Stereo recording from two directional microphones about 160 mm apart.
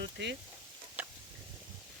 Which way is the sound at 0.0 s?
90° right.